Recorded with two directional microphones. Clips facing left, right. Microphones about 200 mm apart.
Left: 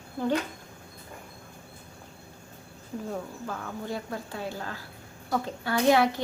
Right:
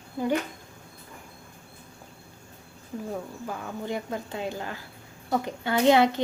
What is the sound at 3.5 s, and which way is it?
Speech, 20° right (ahead or behind).